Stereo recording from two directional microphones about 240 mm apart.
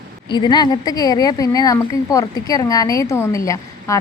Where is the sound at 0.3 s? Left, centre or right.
Centre.